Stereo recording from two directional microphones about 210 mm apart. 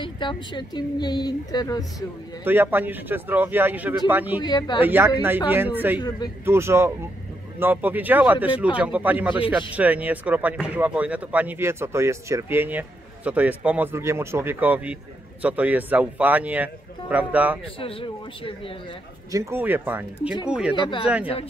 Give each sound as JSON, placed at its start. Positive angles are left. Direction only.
{"t": 0.0, "sound": "speech", "side_deg": 20}
{"t": 2.4, "sound": "speech", "side_deg": -10}
{"t": 4.4, "sound": "speech", "side_deg": 20}
{"t": 4.8, "sound": "speech", "side_deg": -10}
{"t": 5.9, "sound": "speech", "side_deg": 20}
{"t": 6.4, "sound": "speech", "side_deg": -10}
{"t": 17.7, "sound": "speech", "side_deg": 25}
{"t": 19.3, "sound": "speech", "side_deg": -10}
{"t": 20.7, "sound": "speech", "side_deg": 25}